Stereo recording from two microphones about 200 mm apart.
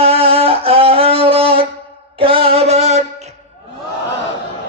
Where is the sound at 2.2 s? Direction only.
30° right (ahead or behind).